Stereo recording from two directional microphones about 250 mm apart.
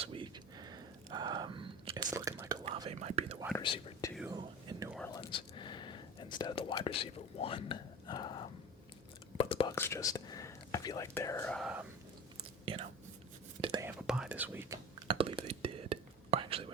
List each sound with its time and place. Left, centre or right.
0.0 s a sound: right
2.1 s whispering: centre
3.6 s whispering: centre
4.3 s whispering: centre
4.9 s whispering: centre
5.3 s whispering: centre
9.7 s speech: centre
12.6 s whispering: right
13.8 s whispering: centre; by 16.6 s right